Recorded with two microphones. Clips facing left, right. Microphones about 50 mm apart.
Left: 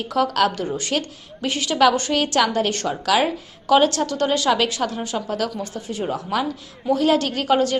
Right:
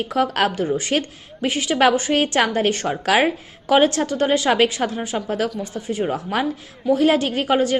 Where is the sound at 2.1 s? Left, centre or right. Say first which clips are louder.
Right 1 dB; right.